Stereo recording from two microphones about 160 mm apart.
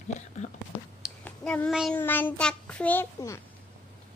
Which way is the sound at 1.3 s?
10° left (ahead or behind).